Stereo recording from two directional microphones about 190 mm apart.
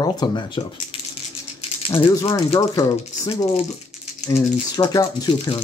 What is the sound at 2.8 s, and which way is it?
Speech, 20° left (ahead or behind).